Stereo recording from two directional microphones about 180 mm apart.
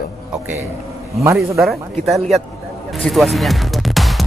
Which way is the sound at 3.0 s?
Centre (ahead or behind).